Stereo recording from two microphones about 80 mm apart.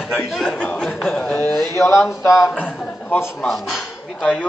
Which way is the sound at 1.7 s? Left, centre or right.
Left.